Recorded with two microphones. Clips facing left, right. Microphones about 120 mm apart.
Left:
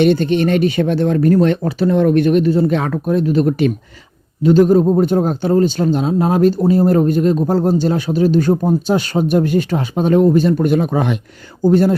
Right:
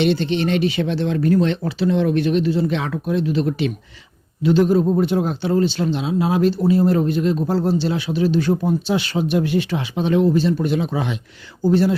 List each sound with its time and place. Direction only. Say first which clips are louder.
0.0 s speech: left 5 dB; 50° left (ahead or behind)